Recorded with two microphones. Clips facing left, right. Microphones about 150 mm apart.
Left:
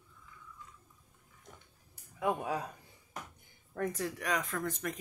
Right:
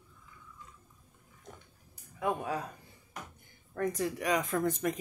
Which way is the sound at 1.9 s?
5° left (ahead or behind).